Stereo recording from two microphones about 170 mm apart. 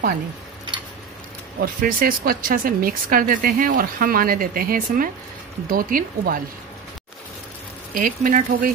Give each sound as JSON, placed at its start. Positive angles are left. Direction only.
{"t": 1.6, "sound": "speech", "side_deg": -55}
{"t": 7.9, "sound": "speech", "side_deg": -55}